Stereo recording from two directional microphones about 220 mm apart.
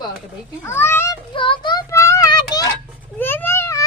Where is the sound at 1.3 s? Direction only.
20° left (ahead or behind).